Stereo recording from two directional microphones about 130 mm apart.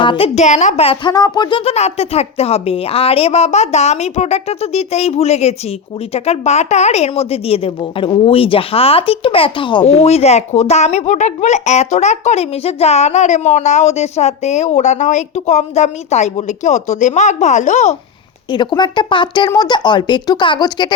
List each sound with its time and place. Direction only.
0.0 s a sound: 40° left (ahead or behind)
0.3 s speech: 65° left (ahead or behind)
1.1 s speech: 30° left (ahead or behind)
1.7 s a woman's voice: 55° left (ahead or behind); by 9.8 s 40° left (ahead or behind)
9.8 s speech: 55° left (ahead or behind)
18.5 s speech: 35° left (ahead or behind)